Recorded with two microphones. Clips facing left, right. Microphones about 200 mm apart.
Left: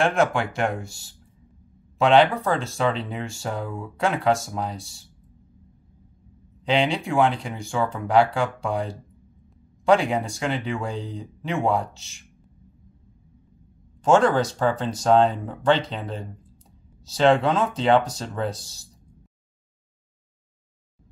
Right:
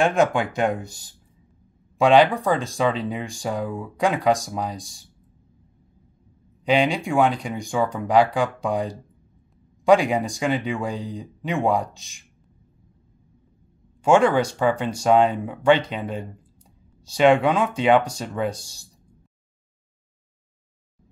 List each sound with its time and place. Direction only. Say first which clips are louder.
0.0 s speech: right 2 dB; 15° right (ahead or behind)
6.6 s speech: right 2 dB; 15° right (ahead or behind)
14.0 s speech: right 1 dB; 10° right (ahead or behind)